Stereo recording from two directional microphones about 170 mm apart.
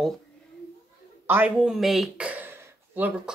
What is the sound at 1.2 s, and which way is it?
Speech, 10° right (ahead or behind).